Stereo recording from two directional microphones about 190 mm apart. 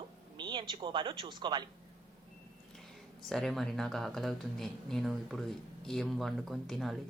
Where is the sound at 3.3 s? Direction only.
Centre (ahead or behind).